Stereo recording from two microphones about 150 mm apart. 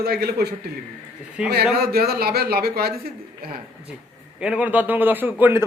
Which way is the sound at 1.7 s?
90° right.